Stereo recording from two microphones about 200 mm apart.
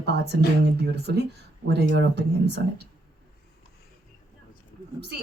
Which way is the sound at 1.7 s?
60° right (ahead or behind).